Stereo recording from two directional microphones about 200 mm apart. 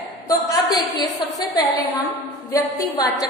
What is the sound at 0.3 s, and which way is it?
A woman's voice, 20° left (ahead or behind).